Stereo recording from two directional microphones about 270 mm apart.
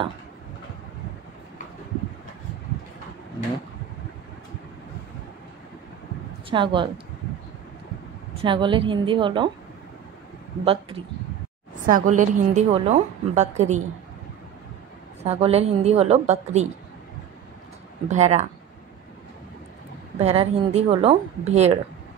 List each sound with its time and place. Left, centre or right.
6.5 s a woman's voice: centre
8.4 s a woman's voice: centre
10.6 s a woman's voice: centre
15.2 s a woman's voice: right
18.1 s a woman's voice: right
20.2 s a woman's voice: right